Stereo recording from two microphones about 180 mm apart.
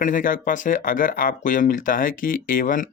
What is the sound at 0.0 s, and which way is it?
Speech, 50° left (ahead or behind).